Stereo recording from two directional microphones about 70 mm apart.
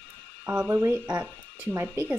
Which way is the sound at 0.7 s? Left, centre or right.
Right.